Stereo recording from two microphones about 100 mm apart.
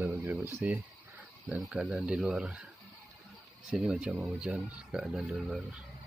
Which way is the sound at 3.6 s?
5° right (ahead or behind).